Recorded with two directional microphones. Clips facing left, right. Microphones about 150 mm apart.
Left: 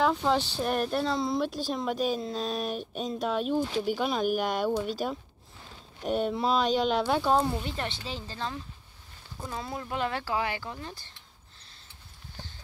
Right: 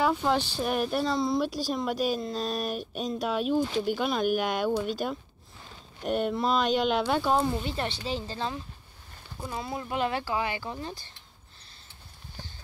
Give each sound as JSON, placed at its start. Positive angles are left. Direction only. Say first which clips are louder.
{"t": 0.0, "sound": "speech", "louder": "even", "side_deg": -5}
{"t": 7.6, "sound": "speech", "louder": "right 2 dB", "side_deg": -30}
{"t": 8.1, "sound": "speech", "louder": "right 4 dB", "side_deg": -15}
{"t": 10.2, "sound": "speech", "louder": "even", "side_deg": -5}
{"t": 10.6, "sound": "speech", "louder": "right 3 dB", "side_deg": -20}